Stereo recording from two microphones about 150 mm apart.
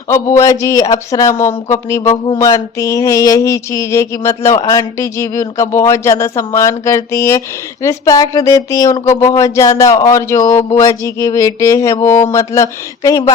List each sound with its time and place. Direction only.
0.1 s speech: 20° left (ahead or behind)